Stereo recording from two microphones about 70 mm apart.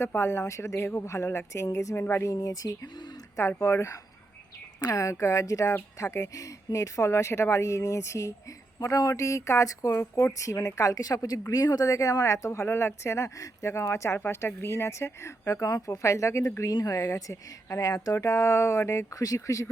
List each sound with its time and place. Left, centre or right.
0.0 s a woman's voice: left
2.0 s speech: left
2.2 s speech: left
3.6 s a woman's voice: left
9.9 s speech: left
10.3 s a woman's voice: left
15.6 s speech: left
16.0 s a woman's voice: left